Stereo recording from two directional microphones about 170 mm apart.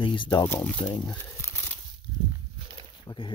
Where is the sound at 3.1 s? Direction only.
25° left (ahead or behind).